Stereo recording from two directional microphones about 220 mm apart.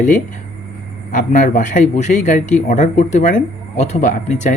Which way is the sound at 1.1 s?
35° left (ahead or behind).